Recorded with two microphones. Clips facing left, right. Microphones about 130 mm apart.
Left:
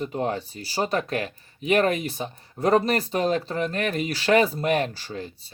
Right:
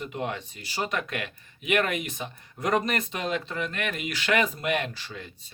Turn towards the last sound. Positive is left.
turn(degrees=35)  # may be behind; listen again after turning